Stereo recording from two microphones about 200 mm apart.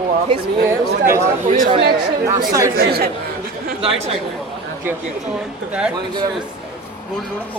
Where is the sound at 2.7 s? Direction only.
50° right (ahead or behind).